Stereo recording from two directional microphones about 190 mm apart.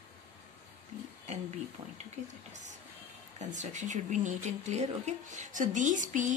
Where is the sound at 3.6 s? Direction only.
40° right (ahead or behind).